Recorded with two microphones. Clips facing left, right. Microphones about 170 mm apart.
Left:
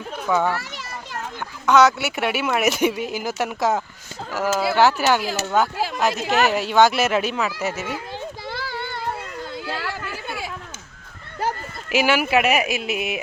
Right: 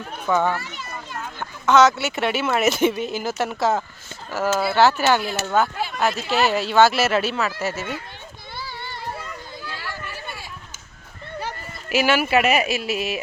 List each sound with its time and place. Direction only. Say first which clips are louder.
0.3 s speech: even; 10° left (ahead or behind)
1.6 s speech: even; 15° left (ahead or behind)
8.5 s child singing: even; 60° left (ahead or behind)
9.6 s a sound: left 3 dB; 90° left
11.9 s speech: even; 15° left (ahead or behind)